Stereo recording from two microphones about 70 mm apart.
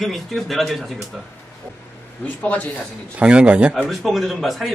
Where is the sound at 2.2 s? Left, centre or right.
Left.